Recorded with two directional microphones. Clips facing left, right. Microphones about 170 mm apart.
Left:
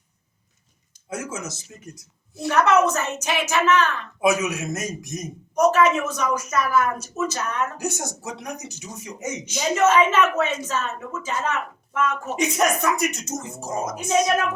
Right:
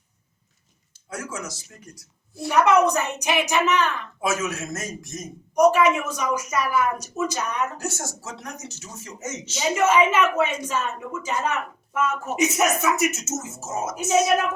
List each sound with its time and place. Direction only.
1.1 s a man's voice: 20° left (ahead or behind)
2.5 s a woman's voice: 10° right (ahead or behind)
4.2 s speech: 15° left (ahead or behind)
5.5 s a woman's voice: 10° right (ahead or behind)
7.8 s speech: 15° left (ahead or behind)
9.7 s a woman's voice: 10° right (ahead or behind)